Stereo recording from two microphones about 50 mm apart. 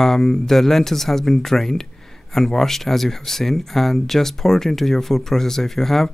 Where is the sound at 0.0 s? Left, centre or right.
Centre.